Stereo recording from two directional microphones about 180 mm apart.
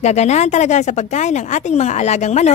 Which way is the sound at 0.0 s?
40° left (ahead or behind).